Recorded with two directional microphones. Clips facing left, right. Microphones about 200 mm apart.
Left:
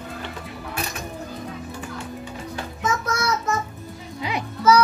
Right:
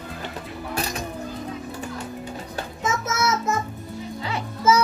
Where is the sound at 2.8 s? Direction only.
25° right (ahead or behind).